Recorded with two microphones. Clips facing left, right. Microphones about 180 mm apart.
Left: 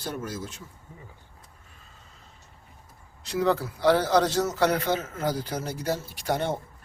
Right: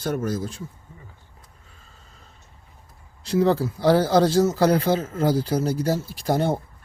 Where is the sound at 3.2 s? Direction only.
30° right (ahead or behind).